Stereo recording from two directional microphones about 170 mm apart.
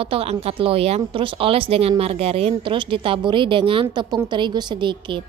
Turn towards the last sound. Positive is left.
turn(degrees=-30)  # may be behind; listen again after turning